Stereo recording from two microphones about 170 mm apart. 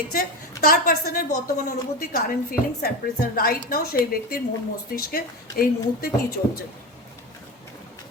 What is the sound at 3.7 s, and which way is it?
A woman's voice, 60° left (ahead or behind).